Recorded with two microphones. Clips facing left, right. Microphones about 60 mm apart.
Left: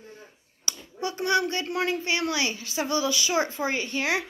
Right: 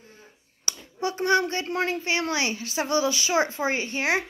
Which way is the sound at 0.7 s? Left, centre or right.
Right.